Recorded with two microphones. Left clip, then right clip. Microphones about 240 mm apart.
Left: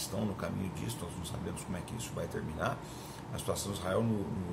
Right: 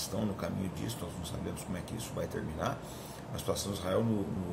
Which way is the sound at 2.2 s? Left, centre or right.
Centre.